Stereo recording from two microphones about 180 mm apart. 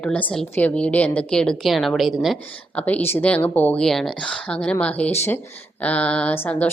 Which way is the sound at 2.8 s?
10° left (ahead or behind).